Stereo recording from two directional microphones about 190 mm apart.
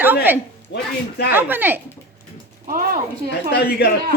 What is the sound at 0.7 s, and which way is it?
Speech, 70° left (ahead or behind).